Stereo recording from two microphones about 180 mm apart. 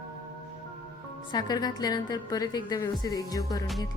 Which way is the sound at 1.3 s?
20° left (ahead or behind).